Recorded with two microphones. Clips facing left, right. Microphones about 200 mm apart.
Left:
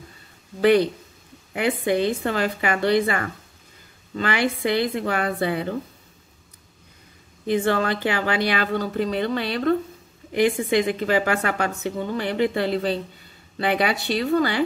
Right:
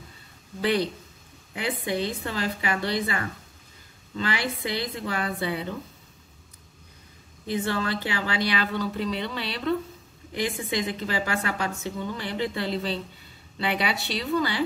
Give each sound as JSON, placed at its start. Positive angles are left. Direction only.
{"t": 0.6, "sound": "a woman's voice", "side_deg": 50}
{"t": 7.4, "sound": "a woman's voice", "side_deg": 55}